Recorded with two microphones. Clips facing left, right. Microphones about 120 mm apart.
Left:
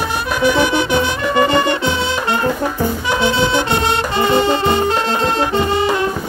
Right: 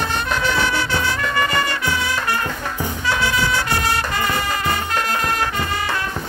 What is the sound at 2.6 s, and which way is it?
Brass instrument, 15° left (ahead or behind).